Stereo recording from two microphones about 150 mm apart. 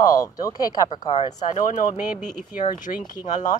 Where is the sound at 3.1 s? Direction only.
55° left (ahead or behind).